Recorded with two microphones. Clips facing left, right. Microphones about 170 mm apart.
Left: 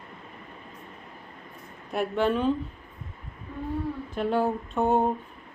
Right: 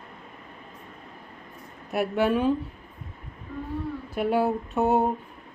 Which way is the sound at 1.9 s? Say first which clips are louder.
Right 2 dB; 10° right (ahead or behind).